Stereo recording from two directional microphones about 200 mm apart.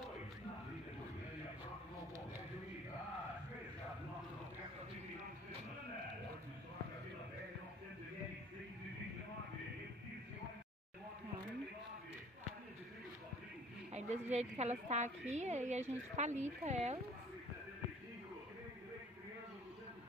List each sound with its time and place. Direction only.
13.9 s a woman's voice: 35° right (ahead or behind)